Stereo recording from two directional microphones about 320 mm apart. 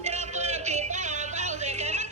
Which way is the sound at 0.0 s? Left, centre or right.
Right.